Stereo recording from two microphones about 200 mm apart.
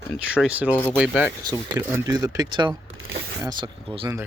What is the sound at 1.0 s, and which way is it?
Speech, 5° right (ahead or behind).